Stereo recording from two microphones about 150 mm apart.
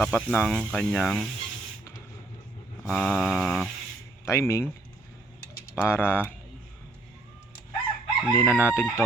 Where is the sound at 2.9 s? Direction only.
Centre (ahead or behind).